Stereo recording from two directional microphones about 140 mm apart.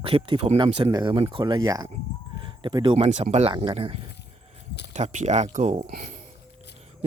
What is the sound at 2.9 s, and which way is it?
Speech, 45° right (ahead or behind).